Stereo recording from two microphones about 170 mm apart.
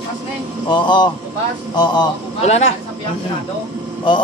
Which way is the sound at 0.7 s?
25° left (ahead or behind).